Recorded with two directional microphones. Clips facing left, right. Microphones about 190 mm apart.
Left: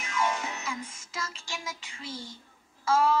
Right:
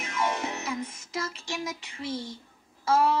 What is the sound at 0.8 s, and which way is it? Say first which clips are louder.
Music: right 5 dB; 60° right (ahead or behind).